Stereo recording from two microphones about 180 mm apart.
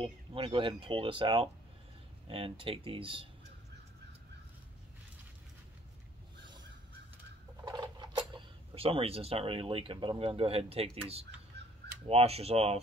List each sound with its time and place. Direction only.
0.0 s speech: 30° right (ahead or behind)
7.6 s speech: 25° right (ahead or behind)